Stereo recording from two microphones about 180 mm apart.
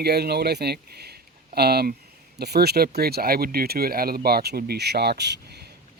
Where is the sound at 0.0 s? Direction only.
65° right (ahead or behind).